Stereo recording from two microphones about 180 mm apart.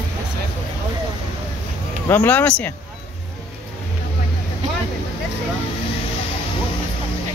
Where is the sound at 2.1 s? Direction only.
10° left (ahead or behind).